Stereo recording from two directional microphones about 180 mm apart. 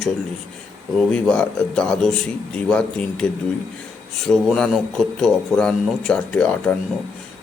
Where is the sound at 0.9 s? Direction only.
5° left (ahead or behind).